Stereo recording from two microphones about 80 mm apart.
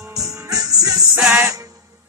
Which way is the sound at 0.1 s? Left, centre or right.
Right.